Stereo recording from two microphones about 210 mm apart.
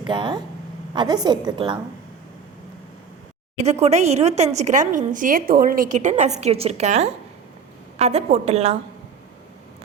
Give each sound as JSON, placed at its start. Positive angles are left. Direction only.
{"t": 0.0, "sound": "a woman's voice", "side_deg": -20}
{"t": 3.6, "sound": "a woman's voice", "side_deg": -30}